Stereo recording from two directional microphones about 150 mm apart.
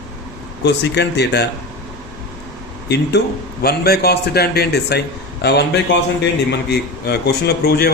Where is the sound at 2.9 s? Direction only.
90° left.